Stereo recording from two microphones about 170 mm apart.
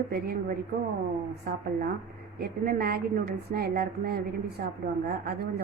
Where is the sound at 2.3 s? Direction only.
65° right (ahead or behind).